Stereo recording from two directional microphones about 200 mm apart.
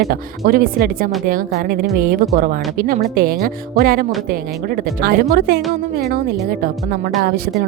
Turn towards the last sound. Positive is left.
turn(degrees=-45)  # may be behind; listen again after turning